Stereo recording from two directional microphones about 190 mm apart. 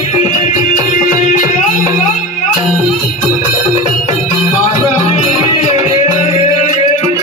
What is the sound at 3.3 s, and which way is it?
Music, 40° left (ahead or behind).